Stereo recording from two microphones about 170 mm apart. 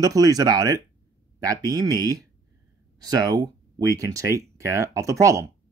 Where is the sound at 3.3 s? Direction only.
25° right (ahead or behind).